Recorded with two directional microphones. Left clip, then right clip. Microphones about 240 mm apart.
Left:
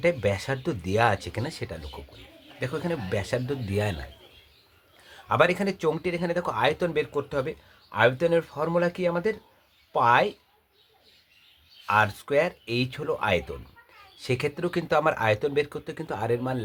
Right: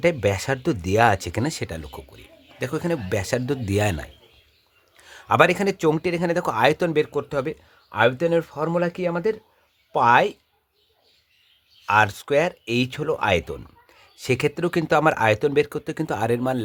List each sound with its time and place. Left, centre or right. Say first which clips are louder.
0.0 s a man's voice: right 4 dB; right
11.9 s a man's voice: right 4 dB; right